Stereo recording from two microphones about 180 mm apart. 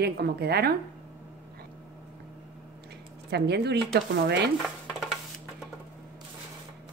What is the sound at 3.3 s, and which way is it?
Speech, 65° right (ahead or behind).